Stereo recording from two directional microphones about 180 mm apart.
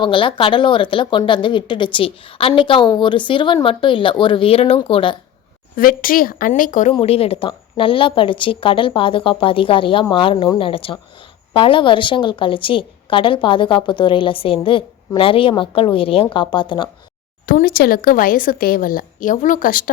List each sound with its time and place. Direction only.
0.0 s a woman's voice: 30° left (ahead or behind)
5.7 s speech: 50° left (ahead or behind)
6.9 s a woman's voice: 35° left (ahead or behind)
17.4 s speech: 55° left (ahead or behind)